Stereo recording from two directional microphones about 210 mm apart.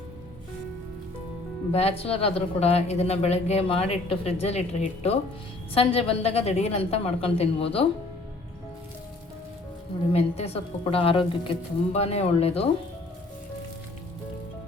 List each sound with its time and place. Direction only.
1.7 s speech: 30° left (ahead or behind)
10.1 s speech: 30° left (ahead or behind)